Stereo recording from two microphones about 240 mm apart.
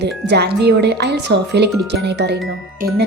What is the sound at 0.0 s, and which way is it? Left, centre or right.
A woman's voice, right.